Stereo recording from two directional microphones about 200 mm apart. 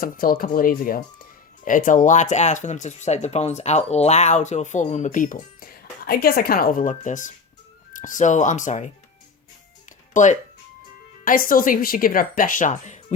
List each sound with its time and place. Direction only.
0.0 s speech: 45° left (ahead or behind)
10.1 s speech: 40° left (ahead or behind)